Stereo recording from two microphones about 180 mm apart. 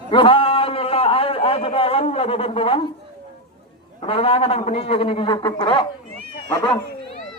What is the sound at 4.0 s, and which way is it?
A man's voice, 30° left (ahead or behind).